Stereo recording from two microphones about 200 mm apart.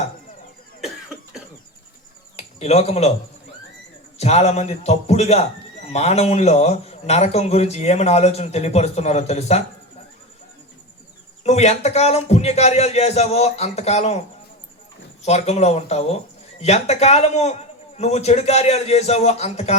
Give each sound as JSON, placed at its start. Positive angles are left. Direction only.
{"t": 2.3, "sound": "a sound", "side_deg": 35}
{"t": 4.2, "sound": "speech", "side_deg": 30}
{"t": 11.4, "sound": "speech", "side_deg": 35}
{"t": 15.2, "sound": "speech", "side_deg": 35}